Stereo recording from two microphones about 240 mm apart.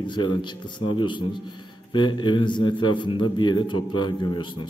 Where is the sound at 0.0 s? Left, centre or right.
Centre.